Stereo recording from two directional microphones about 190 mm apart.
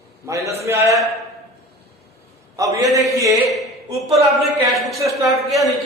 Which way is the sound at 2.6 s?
15° right (ahead or behind).